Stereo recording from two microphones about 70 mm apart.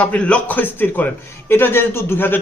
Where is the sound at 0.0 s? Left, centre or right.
Centre.